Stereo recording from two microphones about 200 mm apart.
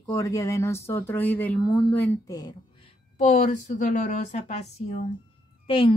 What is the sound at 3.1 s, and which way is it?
A woman's voice, 35° left (ahead or behind).